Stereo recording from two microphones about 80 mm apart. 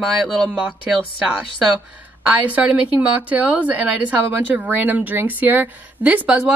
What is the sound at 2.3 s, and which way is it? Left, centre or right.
Speech, centre.